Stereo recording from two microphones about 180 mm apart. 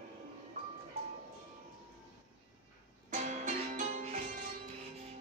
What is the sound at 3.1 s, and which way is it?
Music, 40° right (ahead or behind).